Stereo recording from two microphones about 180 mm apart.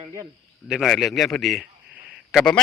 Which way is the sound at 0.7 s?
Centre (ahead or behind).